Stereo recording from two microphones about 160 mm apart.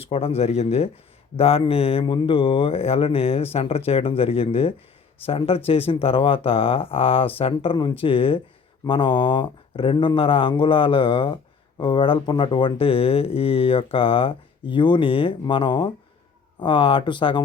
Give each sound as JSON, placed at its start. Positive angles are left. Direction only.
{"t": 0.0, "sound": "speech", "side_deg": 35}